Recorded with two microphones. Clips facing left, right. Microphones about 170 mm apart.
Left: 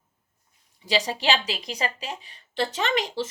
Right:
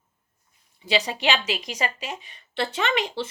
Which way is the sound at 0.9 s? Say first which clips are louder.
Even; 40° left (ahead or behind).